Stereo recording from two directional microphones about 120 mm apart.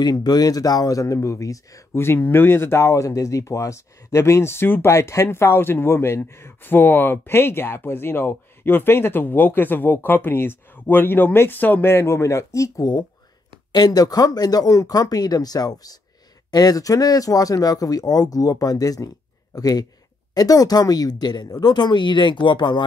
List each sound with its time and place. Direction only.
0.0 s speech: 35° left (ahead or behind)